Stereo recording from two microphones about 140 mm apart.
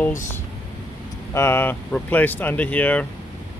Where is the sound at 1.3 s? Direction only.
15° left (ahead or behind).